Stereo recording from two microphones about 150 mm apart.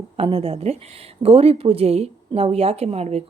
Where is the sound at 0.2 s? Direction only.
40° right (ahead or behind).